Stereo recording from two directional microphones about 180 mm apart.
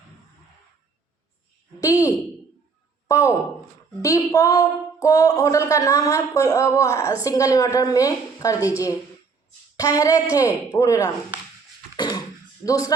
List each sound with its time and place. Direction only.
1.8 s speech: 20° left (ahead or behind)
4.0 s speech: 20° left (ahead or behind)
11.9 s beatboxing: 20° left (ahead or behind)
12.6 s speech: 20° left (ahead or behind)